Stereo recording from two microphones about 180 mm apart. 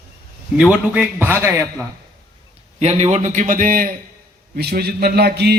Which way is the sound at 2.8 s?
40° right (ahead or behind).